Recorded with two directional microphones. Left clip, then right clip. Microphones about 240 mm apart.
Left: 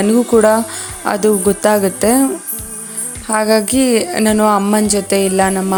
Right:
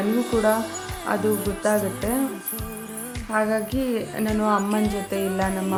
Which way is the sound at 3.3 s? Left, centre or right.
Left.